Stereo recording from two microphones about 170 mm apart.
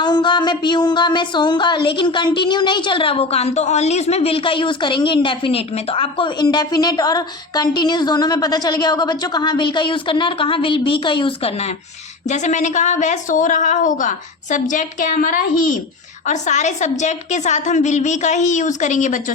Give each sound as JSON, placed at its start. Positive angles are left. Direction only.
{"t": 0.0, "sound": "speech", "side_deg": 25}
{"t": 12.3, "sound": "a woman's voice", "side_deg": 45}